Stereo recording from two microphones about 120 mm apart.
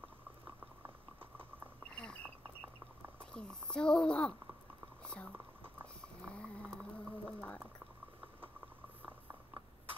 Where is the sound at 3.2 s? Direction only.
5° left (ahead or behind).